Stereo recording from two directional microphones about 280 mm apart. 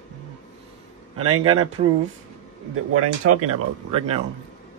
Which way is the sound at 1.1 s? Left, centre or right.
Right.